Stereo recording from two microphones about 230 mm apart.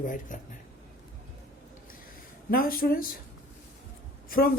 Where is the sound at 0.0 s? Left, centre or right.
Left.